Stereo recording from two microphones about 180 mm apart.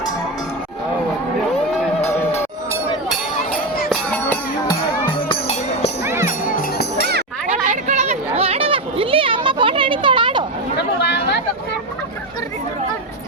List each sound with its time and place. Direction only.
3.8 s music: 5° left (ahead or behind)
5.3 s music: 35° left (ahead or behind)
6.0 s music: 15° right (ahead or behind)
6.2 s music: 50° left (ahead or behind)
7.5 s a sound: 45° right (ahead or behind); by 10.4 s 25° right (ahead or behind)
10.8 s chatter: 70° left (ahead or behind)